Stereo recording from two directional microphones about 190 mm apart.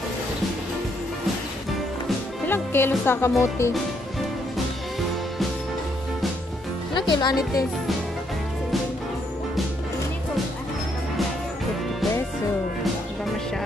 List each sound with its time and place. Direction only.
2.0 s music: 10° left (ahead or behind)
3.1 s speech: 15° left (ahead or behind)
6.9 s speech: 25° left (ahead or behind)